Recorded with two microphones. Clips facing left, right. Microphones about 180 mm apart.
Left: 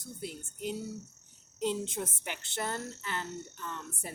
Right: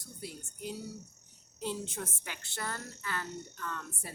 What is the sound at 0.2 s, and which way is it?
Speech, 20° left (ahead or behind).